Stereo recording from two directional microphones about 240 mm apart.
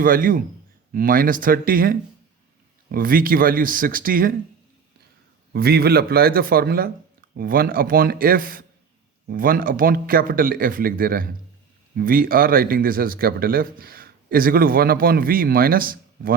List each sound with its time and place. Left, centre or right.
0.0 s speech: right
5.5 s speech: right